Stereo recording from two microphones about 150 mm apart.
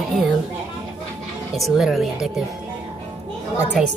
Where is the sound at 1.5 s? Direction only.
Centre (ahead or behind).